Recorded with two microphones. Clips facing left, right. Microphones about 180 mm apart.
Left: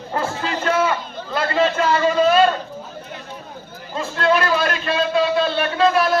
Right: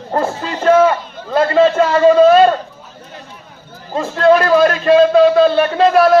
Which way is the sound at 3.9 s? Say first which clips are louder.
Right 8 dB; 40° right (ahead or behind).